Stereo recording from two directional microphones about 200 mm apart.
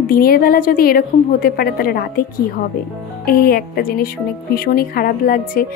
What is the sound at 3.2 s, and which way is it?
Speech, 50° left (ahead or behind).